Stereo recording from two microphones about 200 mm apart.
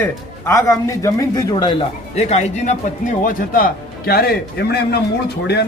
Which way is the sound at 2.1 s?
35° left (ahead or behind).